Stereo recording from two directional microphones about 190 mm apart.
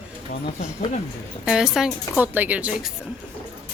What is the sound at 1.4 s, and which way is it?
A woman's voice, 5° right (ahead or behind).